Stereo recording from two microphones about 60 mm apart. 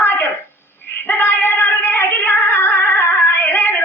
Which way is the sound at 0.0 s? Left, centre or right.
Left.